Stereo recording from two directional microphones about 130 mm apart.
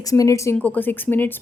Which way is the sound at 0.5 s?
10° left (ahead or behind).